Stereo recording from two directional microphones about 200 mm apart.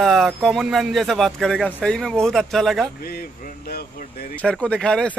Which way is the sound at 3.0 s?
50° left (ahead or behind).